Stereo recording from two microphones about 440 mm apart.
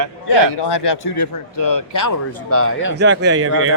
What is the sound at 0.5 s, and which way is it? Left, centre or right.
A man's voice, left.